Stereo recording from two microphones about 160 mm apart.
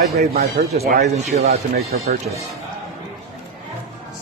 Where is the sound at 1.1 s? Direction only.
40° right (ahead or behind).